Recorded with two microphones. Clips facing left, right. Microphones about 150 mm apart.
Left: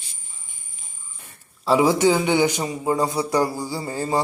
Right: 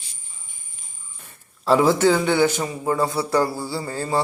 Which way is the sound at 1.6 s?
10° left (ahead or behind).